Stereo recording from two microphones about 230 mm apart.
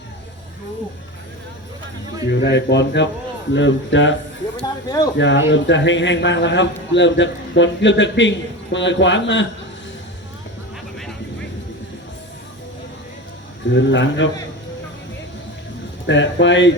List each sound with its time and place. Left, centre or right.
2.3 s speech: left
4.9 s speech: centre
5.1 s speech: left
10.9 s vehicle: centre
13.7 s speech: left
16.0 s speech: left